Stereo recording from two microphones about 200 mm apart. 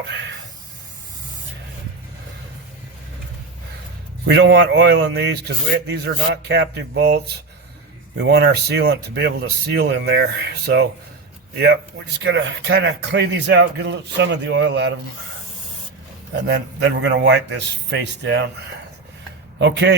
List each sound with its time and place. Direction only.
4.4 s speech: 60° right (ahead or behind)
8.2 s speech: 55° right (ahead or behind)
16.3 s speech: 60° right (ahead or behind)
19.5 s a man's voice: 60° right (ahead or behind)